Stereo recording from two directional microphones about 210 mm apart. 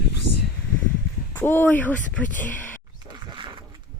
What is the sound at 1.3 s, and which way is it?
Speech, 10° left (ahead or behind).